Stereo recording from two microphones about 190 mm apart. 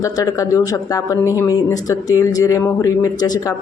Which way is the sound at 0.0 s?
15° left (ahead or behind).